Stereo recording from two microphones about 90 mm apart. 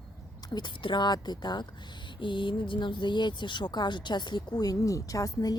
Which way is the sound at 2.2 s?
65° left (ahead or behind).